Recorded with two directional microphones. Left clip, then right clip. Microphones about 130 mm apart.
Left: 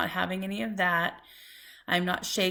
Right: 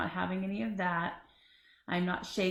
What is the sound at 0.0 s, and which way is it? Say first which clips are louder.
Speech: left 5 dB; 20° left (ahead or behind).